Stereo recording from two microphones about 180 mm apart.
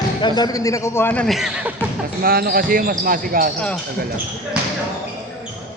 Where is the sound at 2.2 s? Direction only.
55° right (ahead or behind).